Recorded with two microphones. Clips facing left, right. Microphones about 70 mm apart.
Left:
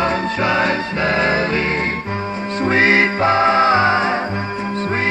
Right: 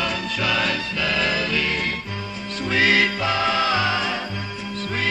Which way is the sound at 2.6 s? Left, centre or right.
Left.